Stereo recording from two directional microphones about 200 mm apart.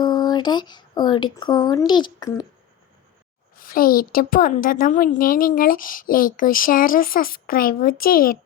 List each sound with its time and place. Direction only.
0.0 s speech: 20° left (ahead or behind)
3.6 s a woman's voice: 45° left (ahead or behind)